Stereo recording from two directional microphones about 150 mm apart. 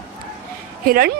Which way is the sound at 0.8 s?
75° right (ahead or behind).